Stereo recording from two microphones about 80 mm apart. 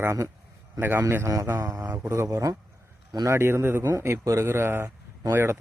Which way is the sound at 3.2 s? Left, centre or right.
Right.